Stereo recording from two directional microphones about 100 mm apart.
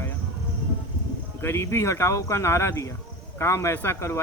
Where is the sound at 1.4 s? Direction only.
25° left (ahead or behind).